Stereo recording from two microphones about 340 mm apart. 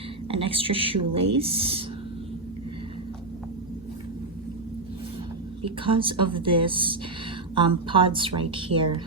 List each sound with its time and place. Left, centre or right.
0.3 s speech: centre
5.6 s speech: centre